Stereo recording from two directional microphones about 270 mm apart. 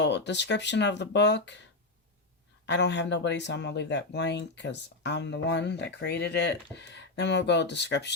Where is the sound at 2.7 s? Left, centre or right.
Left.